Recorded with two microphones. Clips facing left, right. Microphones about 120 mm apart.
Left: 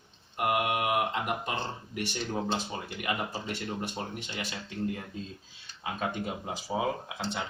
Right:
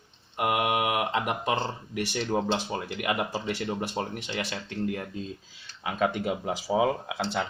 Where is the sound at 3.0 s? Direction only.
65° right (ahead or behind).